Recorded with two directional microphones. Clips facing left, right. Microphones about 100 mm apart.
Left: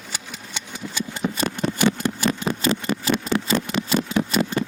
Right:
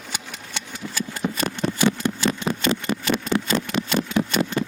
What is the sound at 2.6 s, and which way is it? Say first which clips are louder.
Engine: left 1 dB; 35° left (ahead or behind).